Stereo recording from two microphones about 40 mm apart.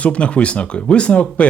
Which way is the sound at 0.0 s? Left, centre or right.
Left.